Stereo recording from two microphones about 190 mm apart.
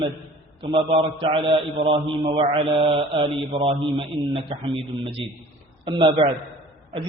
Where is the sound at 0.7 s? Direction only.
30° right (ahead or behind).